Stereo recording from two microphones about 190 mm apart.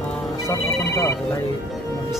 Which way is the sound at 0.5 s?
15° left (ahead or behind).